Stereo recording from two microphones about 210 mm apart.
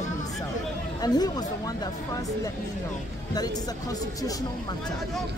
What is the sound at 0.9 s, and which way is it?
Speech, 20° left (ahead or behind).